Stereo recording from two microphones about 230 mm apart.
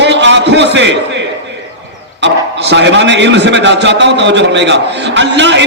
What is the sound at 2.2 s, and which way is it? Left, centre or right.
A man's voice, right.